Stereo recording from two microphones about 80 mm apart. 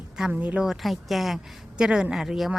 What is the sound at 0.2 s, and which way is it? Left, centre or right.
Speech, centre.